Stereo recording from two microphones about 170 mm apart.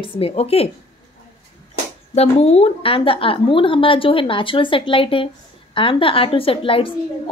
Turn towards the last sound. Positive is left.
turn(degrees=30)  # may be behind; listen again after turning